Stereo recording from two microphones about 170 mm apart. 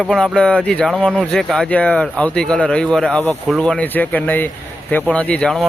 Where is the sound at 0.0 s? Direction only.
5° left (ahead or behind).